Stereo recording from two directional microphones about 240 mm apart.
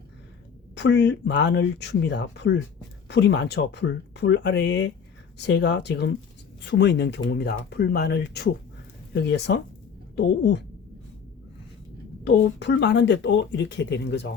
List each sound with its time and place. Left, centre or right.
0.8 s speech: left
12.2 s speech: left